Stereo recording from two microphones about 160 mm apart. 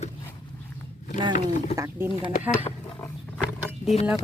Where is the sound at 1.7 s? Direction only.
15° right (ahead or behind).